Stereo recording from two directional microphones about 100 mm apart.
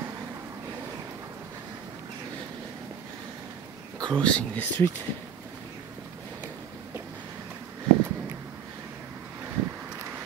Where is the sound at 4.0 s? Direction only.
50° right (ahead or behind).